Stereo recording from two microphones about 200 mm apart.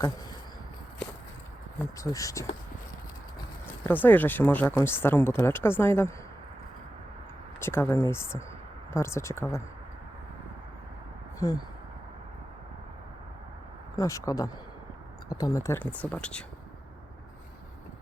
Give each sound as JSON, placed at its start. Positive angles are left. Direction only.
{"t": 1.8, "sound": "speech", "side_deg": 15}
{"t": 3.8, "sound": "speech", "side_deg": 10}
{"t": 7.6, "sound": "speech", "side_deg": 10}
{"t": 11.3, "sound": "speech", "side_deg": 15}
{"t": 13.9, "sound": "speech", "side_deg": 15}